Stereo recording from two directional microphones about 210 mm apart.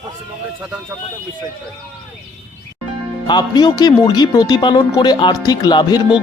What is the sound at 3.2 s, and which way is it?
Speech, 20° left (ahead or behind).